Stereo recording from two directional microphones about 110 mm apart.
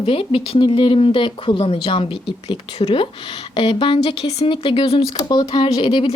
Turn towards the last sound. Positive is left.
turn(degrees=45)  # may be behind; listen again after turning